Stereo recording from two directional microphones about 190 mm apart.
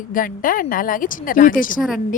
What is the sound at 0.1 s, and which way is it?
A woman's voice, 45° left (ahead or behind).